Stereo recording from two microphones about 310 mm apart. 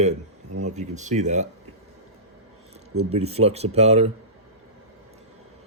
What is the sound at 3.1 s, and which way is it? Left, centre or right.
Speech, centre.